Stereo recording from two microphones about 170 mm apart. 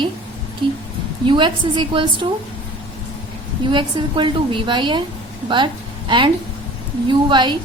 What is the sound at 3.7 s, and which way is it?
A woman's voice, 30° right (ahead or behind).